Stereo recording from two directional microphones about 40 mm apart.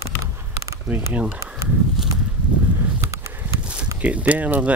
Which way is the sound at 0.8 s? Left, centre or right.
Right.